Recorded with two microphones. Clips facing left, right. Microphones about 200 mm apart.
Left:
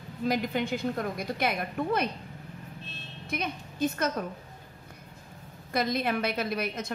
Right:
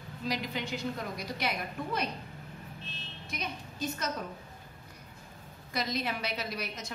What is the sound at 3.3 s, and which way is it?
Speech, 55° left (ahead or behind).